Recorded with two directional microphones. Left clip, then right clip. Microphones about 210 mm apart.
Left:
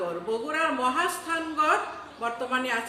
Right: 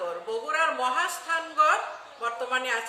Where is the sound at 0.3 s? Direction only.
20° right (ahead or behind).